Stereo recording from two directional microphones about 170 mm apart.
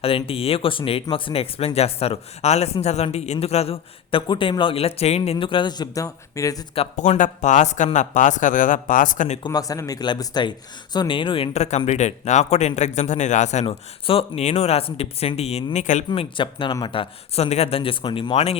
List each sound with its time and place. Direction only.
0.0 s speech: 35° left (ahead or behind)
6.7 s speech: 40° left (ahead or behind)
9.4 s speech: 20° left (ahead or behind); by 16.0 s 45° left (ahead or behind)
16.0 s speech: 30° left (ahead or behind)